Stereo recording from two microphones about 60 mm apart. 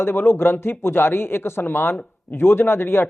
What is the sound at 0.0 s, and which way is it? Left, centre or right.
Speech, left.